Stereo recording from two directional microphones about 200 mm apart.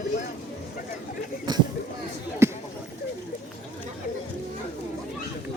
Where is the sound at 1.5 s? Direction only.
20° right (ahead or behind).